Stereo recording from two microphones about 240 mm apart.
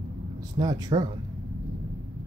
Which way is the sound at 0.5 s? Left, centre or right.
Centre.